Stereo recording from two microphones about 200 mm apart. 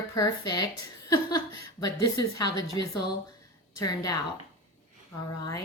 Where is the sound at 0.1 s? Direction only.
20° left (ahead or behind).